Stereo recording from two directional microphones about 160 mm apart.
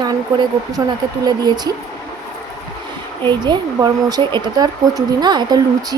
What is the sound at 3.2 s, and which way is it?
Speech, 30° right (ahead or behind).